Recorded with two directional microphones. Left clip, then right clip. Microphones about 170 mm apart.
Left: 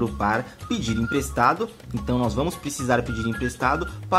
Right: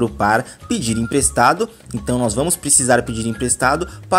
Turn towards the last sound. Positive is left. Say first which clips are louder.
# right 5 dB
turn(degrees=-25)  # may be behind; listen again after turning